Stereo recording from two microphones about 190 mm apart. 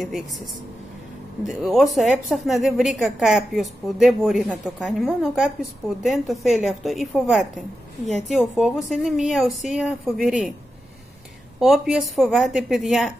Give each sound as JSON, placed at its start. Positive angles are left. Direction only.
{"t": 1.4, "sound": "a woman's voice", "side_deg": 0}
{"t": 11.6, "sound": "a woman's voice", "side_deg": 0}